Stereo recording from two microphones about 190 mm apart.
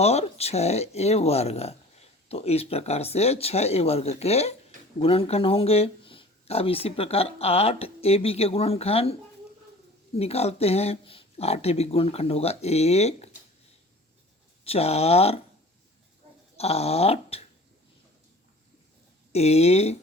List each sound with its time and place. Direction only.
0.0 s speech: 35° left (ahead or behind)
10.2 s speech: 35° left (ahead or behind)
14.6 s speech: 30° left (ahead or behind)
16.6 s speech: 35° left (ahead or behind)
19.3 s speech: 35° left (ahead or behind)